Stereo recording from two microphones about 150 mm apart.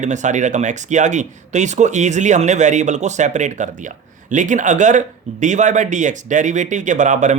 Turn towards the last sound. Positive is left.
turn(degrees=-55)  # may be behind; listen again after turning